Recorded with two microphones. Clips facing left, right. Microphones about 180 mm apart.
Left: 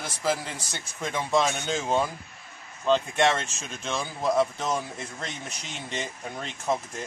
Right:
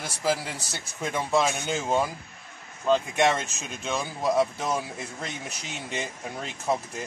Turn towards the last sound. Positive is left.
turn(degrees=-5)  # may be behind; listen again after turning